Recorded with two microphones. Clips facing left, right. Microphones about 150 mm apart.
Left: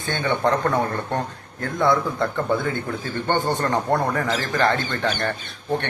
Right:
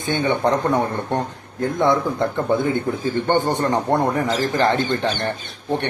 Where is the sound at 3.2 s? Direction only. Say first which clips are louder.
Right 2 dB; 20° right (ahead or behind).